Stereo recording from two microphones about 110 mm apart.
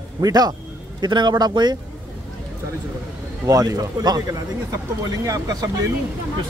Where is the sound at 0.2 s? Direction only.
35° right (ahead or behind).